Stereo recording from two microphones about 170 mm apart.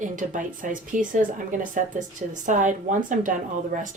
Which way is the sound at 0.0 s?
50° right (ahead or behind).